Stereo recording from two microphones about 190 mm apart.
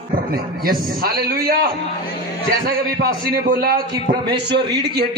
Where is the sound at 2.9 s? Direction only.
55° right (ahead or behind).